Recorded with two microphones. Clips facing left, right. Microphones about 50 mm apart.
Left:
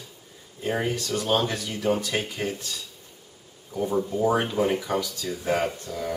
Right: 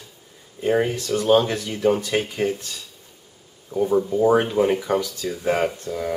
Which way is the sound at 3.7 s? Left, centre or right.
Centre.